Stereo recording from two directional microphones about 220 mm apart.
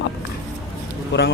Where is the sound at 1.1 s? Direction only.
55° left (ahead or behind).